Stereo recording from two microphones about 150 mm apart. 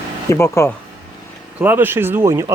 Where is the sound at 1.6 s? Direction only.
15° right (ahead or behind).